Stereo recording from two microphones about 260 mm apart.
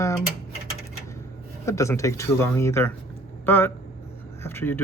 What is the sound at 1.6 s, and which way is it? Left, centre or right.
Speech, centre.